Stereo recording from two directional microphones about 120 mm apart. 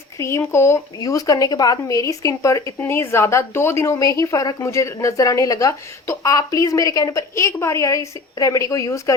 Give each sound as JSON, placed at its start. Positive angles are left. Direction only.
{"t": 0.2, "sound": "a woman's voice", "side_deg": 25}